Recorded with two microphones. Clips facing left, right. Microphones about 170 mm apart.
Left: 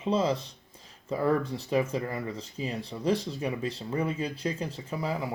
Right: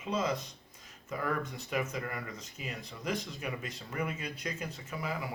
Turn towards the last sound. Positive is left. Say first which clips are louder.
# left 6 dB
turn(degrees=30)  # may be behind; listen again after turning